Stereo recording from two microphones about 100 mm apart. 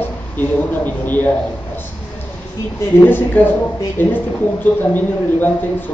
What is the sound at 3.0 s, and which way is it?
Speech, 20° left (ahead or behind).